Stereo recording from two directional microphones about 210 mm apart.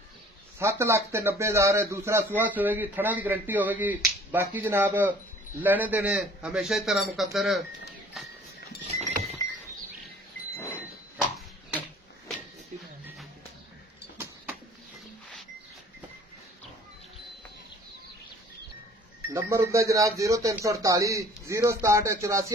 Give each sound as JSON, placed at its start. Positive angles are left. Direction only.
{"t": 0.6, "sound": "a man's voice", "side_deg": -15}
{"t": 8.8, "sound": "goat", "side_deg": -35}
{"t": 19.3, "sound": "speech", "side_deg": -15}